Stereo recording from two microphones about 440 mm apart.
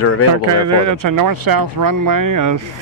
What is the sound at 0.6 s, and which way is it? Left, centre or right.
Speech, right.